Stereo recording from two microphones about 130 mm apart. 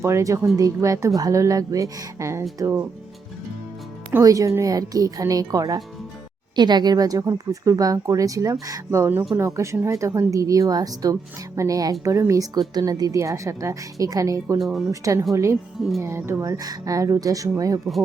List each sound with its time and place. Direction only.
0.0 s speech: 20° right (ahead or behind)
4.2 s speech: 25° right (ahead or behind)
14.6 s speech: centre (ahead or behind)
14.8 s speech: 25° right (ahead or behind)